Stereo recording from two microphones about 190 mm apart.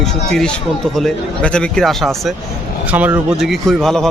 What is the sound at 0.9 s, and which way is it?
A man's voice, 5° left (ahead or behind).